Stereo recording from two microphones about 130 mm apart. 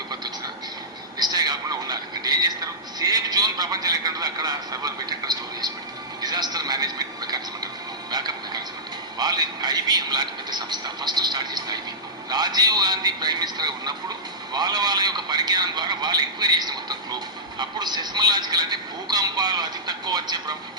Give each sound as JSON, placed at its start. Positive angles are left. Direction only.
{"t": 1.2, "sound": "a sound", "side_deg": -30}
{"t": 8.1, "sound": "television", "side_deg": -30}
{"t": 9.1, "sound": "a man's voice", "side_deg": -30}